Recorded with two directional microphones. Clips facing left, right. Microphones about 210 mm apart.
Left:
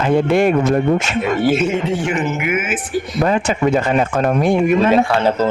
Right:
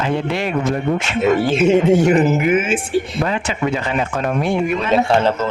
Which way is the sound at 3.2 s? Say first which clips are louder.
Left 4 dB; 45° left (ahead or behind).